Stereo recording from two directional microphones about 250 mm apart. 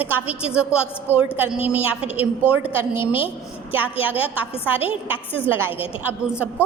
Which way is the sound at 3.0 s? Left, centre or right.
Left.